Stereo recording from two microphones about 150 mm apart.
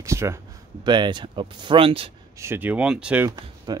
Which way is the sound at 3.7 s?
25° right (ahead or behind).